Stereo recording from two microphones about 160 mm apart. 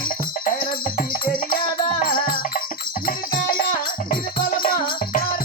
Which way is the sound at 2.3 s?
60° left (ahead or behind).